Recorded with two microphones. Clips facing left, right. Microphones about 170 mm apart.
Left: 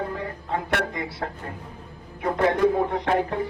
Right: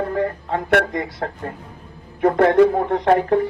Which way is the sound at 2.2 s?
60° right (ahead or behind).